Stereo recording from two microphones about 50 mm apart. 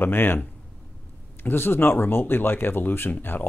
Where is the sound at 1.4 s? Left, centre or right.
Left.